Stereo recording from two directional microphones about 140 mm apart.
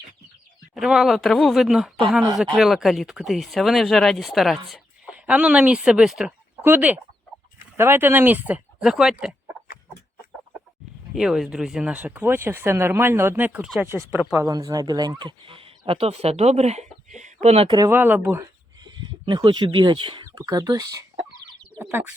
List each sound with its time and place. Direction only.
0.7 s speech: 5° right (ahead or behind)
11.1 s speech: centre (ahead or behind); by 17.7 s 45° right (ahead or behind)
17.7 s speech: 15° right (ahead or behind)
18.8 s speech: 30° right (ahead or behind)
20.2 s speech: 25° right (ahead or behind)